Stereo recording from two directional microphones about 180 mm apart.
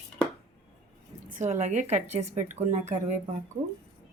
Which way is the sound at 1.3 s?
40° right (ahead or behind).